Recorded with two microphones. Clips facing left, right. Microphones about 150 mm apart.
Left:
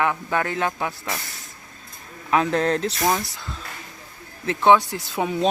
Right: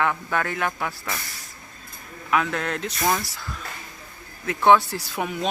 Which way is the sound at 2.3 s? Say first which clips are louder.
Left 4 dB; 30° left (ahead or behind).